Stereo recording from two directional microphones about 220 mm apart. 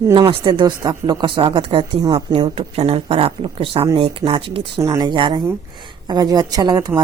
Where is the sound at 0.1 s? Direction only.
20° right (ahead or behind).